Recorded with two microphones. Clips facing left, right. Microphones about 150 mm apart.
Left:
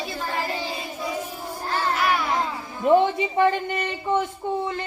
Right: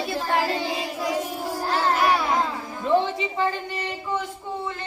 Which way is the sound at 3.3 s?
60° left (ahead or behind).